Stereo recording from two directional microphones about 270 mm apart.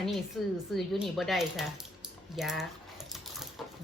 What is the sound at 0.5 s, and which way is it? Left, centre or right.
A woman's voice, centre.